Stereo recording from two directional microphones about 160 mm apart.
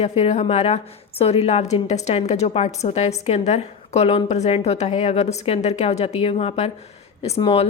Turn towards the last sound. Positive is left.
turn(degrees=35)  # may be behind; listen again after turning